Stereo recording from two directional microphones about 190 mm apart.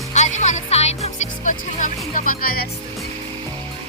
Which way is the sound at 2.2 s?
50° left (ahead or behind).